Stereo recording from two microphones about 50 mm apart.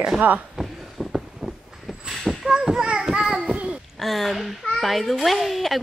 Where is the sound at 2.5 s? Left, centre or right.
Centre.